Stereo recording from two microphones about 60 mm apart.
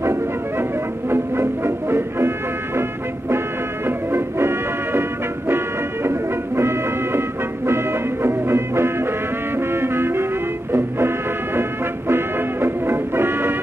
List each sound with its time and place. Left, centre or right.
0.0 s music: right
6.0 s music: right